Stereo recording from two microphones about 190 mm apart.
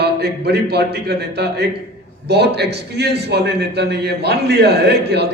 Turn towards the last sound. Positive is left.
turn(degrees=-60)  # may be behind; listen again after turning